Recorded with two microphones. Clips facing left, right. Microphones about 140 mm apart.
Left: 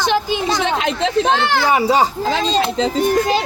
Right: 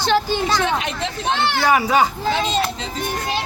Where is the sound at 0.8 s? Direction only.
90° left.